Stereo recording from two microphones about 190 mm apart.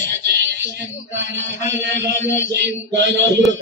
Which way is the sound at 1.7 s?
70° right (ahead or behind).